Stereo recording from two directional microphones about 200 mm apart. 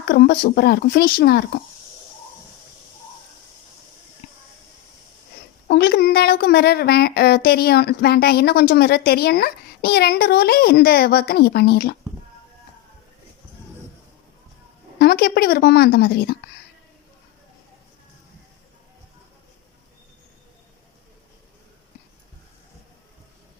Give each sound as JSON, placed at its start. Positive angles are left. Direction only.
{"t": 0.1, "sound": "a woman's voice", "side_deg": 50}
{"t": 4.2, "sound": "a sound", "side_deg": 55}
{"t": 5.6, "sound": "a woman's voice", "side_deg": 55}
{"t": 14.9, "sound": "a woman's voice", "side_deg": 50}